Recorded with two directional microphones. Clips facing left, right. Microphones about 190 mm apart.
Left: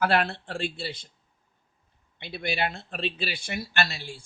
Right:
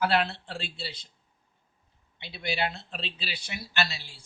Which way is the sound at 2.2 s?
55° left (ahead or behind).